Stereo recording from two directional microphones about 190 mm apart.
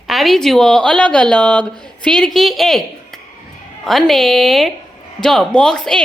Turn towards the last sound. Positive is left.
turn(degrees=5)  # may be behind; listen again after turning